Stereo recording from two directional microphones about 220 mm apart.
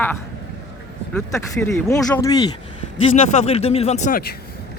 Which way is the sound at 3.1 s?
30° left (ahead or behind).